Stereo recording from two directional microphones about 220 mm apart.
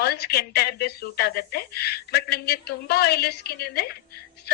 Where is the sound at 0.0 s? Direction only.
45° left (ahead or behind).